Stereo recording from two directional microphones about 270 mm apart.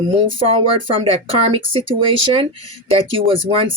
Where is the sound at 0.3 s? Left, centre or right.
Right.